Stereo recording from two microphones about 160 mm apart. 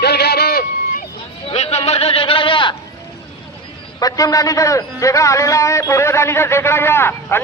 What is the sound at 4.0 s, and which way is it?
A man's voice, 20° left (ahead or behind).